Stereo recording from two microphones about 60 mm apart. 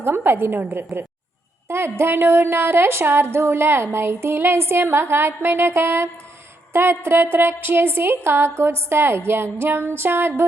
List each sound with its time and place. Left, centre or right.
0.0 s a woman's voice: right